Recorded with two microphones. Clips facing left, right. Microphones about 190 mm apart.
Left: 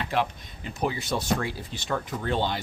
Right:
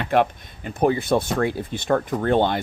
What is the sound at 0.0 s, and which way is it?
Speech, 55° right (ahead or behind).